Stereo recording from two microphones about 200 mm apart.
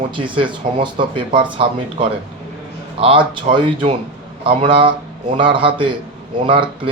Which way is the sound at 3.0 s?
25° right (ahead or behind).